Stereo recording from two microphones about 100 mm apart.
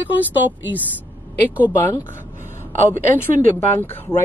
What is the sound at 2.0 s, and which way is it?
Speech, 25° left (ahead or behind).